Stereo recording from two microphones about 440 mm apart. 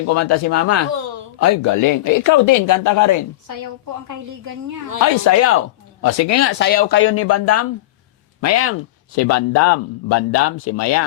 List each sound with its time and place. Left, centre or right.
0.1 s speech: left
5.2 s speech: left
6.6 s speech: left